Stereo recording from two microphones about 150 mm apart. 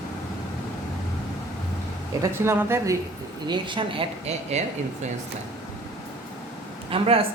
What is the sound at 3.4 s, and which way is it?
Speech, 30° right (ahead or behind).